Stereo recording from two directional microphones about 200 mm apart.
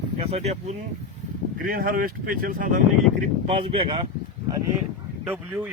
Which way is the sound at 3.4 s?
30° right (ahead or behind).